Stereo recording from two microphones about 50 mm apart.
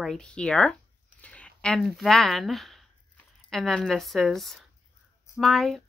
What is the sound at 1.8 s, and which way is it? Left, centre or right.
Speech, centre.